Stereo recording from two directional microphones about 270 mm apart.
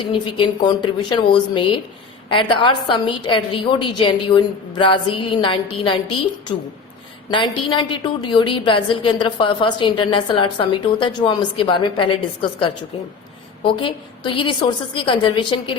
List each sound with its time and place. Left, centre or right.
0.0 s a woman's voice: centre
7.5 s a woman's voice: centre